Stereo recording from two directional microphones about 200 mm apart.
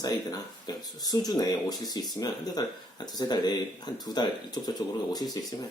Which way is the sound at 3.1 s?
20° left (ahead or behind).